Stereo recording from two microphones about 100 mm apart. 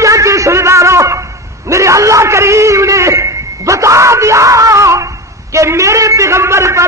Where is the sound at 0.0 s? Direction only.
30° right (ahead or behind).